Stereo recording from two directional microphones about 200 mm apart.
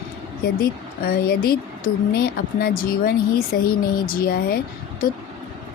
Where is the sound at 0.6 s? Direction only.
50° left (ahead or behind).